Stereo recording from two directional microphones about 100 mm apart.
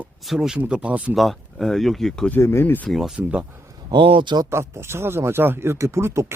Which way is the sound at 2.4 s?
25° left (ahead or behind).